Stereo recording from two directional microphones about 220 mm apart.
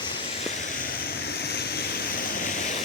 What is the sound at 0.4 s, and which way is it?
Vehicle, 40° left (ahead or behind).